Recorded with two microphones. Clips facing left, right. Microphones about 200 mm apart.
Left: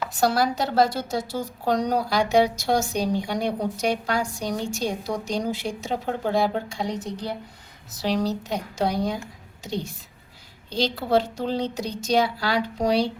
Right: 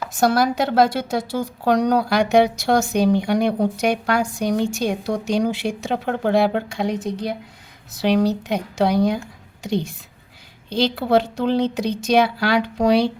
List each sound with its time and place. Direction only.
0.3 s a woman's voice: 55° right (ahead or behind); by 9.2 s 70° right (ahead or behind)
10.9 s a woman's voice: 65° right (ahead or behind)